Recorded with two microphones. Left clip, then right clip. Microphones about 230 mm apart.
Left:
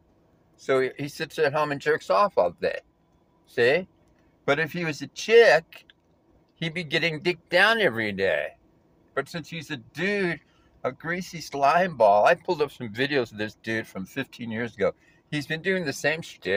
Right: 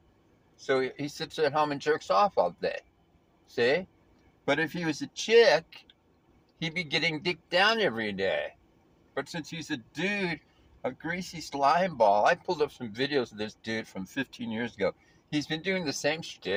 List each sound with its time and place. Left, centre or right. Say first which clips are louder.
0.6 s speech: left 4 dB; centre